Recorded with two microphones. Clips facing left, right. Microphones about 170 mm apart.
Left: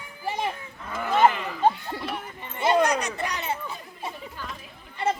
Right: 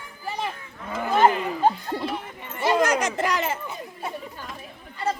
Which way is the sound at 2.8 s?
90° right.